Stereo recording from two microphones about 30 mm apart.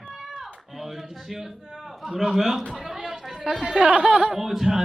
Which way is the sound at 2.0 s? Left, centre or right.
Centre.